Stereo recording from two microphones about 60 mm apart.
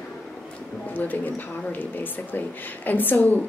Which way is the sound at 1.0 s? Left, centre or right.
Left.